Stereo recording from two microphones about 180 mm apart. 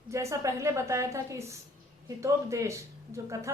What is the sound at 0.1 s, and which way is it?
A woman's voice, 15° right (ahead or behind).